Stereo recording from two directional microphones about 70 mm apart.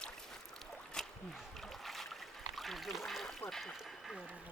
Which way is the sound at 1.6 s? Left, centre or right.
Centre.